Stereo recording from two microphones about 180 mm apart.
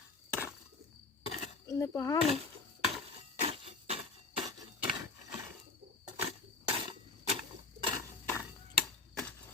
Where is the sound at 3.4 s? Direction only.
35° right (ahead or behind).